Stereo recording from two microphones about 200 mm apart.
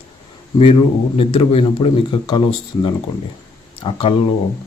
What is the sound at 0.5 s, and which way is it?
Speech, 25° left (ahead or behind).